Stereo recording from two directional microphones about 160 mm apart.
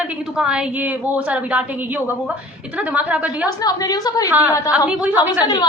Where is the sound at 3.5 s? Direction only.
25° left (ahead or behind).